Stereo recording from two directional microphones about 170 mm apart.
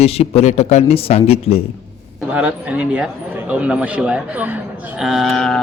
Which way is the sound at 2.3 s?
10° right (ahead or behind).